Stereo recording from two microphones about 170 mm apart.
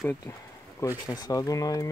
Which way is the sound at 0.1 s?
15° left (ahead or behind).